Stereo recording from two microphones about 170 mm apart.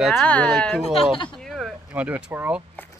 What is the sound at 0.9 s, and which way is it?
Speech, 35° left (ahead or behind).